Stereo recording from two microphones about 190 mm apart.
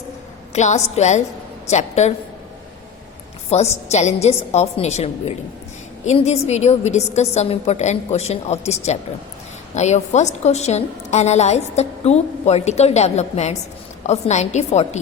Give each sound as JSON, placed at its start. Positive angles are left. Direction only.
{"t": 0.5, "sound": "a woman's voice", "side_deg": 35}
{"t": 3.5, "sound": "a woman's voice", "side_deg": 35}